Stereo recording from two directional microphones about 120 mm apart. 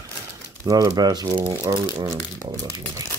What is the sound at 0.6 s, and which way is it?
Speech, 25° right (ahead or behind).